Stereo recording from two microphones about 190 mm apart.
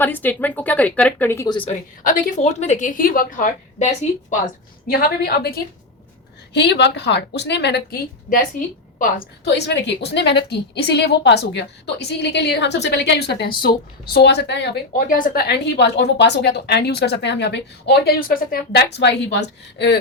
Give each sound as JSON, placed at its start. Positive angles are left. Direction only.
{"t": 0.0, "sound": "speech", "side_deg": 10}
{"t": 2.0, "sound": "a woman's voice", "side_deg": 45}
{"t": 4.9, "sound": "a woman's voice", "side_deg": 55}